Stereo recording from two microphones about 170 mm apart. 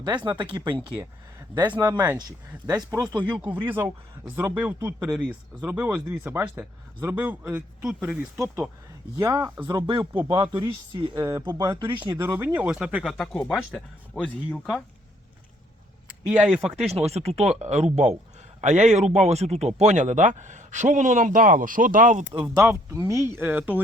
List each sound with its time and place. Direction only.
0.5 s speech: 25° right (ahead or behind)
1.4 s speech: 10° right (ahead or behind)
1.8 s speech: 20° right (ahead or behind)
3.2 s speech: 10° right (ahead or behind)
9.1 s speech: 20° right (ahead or behind); by 14.7 s 10° left (ahead or behind)
16.2 s speech: 10° right (ahead or behind)
16.7 s speech: 35° right (ahead or behind)
22.3 s speech: 20° right (ahead or behind)